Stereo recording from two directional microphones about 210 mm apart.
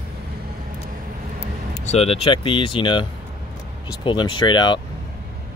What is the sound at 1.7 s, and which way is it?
Speech, 30° left (ahead or behind).